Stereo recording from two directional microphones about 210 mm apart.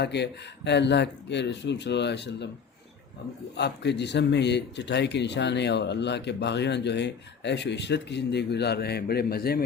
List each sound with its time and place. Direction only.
0.0 s speech: 55° left (ahead or behind)
3.6 s speech: 55° left (ahead or behind)